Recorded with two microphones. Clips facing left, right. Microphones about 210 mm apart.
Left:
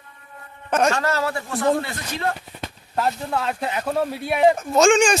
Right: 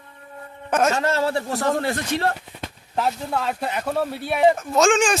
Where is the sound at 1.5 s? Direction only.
45° right (ahead or behind).